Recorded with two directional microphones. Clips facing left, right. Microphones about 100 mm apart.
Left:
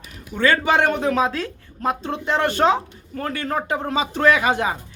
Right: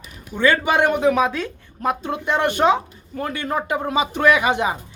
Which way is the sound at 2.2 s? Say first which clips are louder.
Right 1 dB; 15° right (ahead or behind).